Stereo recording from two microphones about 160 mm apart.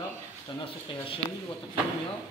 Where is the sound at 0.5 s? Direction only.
35° left (ahead or behind).